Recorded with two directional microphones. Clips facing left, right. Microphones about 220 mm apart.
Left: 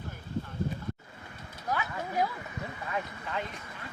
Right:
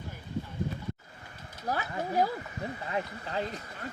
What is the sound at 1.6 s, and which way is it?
Speech, 35° right (ahead or behind).